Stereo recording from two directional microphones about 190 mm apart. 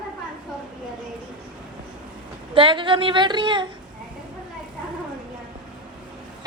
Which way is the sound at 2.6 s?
25° right (ahead or behind).